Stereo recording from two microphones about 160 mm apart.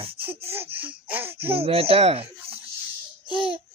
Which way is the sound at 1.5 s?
35° right (ahead or behind).